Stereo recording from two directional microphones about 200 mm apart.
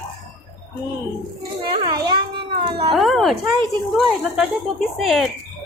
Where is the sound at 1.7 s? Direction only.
25° right (ahead or behind).